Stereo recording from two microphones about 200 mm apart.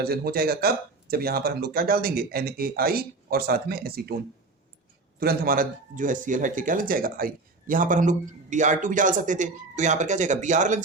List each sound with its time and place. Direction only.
0.0 s speech: 50° right (ahead or behind)
5.2 s speech: 50° right (ahead or behind)